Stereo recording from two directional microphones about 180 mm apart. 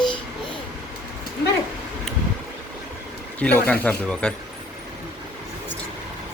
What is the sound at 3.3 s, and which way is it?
Speech, 10° left (ahead or behind).